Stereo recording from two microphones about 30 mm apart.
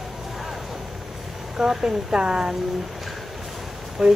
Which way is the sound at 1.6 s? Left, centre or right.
Centre.